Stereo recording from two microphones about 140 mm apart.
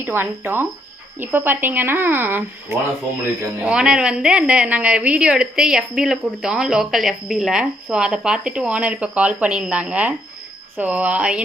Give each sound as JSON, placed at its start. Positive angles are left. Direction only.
{"t": 0.0, "sound": "a woman's voice", "side_deg": -15}